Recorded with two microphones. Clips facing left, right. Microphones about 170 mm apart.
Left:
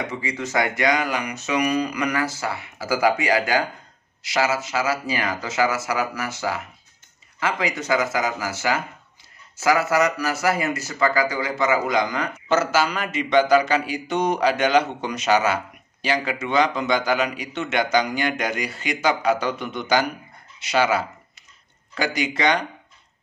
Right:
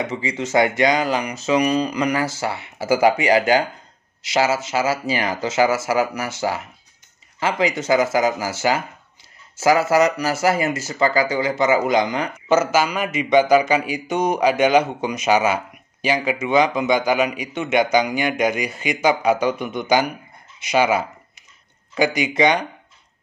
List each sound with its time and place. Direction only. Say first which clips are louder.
0.1 s speech: right 5 dB; 25° right (ahead or behind)
7.3 s speech: right 4 dB; 30° right (ahead or behind)
12.4 s speech: right 3 dB; 15° right (ahead or behind)